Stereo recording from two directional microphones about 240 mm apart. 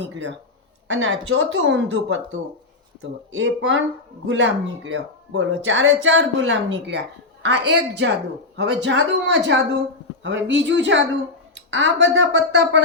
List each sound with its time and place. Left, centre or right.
0.0 s speech: right